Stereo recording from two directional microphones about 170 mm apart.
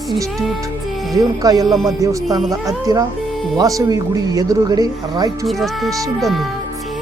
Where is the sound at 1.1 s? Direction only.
20° right (ahead or behind).